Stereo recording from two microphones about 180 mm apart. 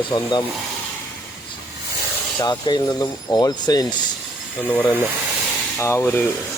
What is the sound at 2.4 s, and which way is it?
Speech, 25° left (ahead or behind).